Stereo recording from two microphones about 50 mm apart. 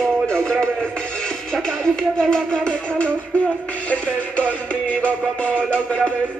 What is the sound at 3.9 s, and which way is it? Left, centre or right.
Music, left.